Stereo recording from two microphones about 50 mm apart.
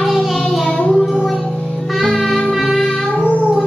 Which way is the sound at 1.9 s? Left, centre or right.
Centre.